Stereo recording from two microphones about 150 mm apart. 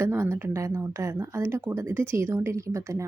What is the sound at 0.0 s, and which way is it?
Speech, 15° right (ahead or behind).